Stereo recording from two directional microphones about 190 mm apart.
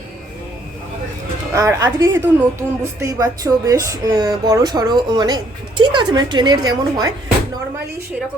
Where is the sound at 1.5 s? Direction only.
15° right (ahead or behind).